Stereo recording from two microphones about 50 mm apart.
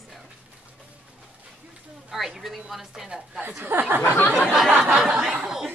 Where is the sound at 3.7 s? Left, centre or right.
Right.